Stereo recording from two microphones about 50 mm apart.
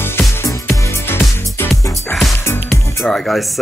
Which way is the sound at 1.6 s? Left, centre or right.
Left.